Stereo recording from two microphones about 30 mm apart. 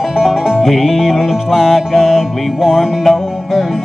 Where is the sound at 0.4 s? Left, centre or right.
Centre.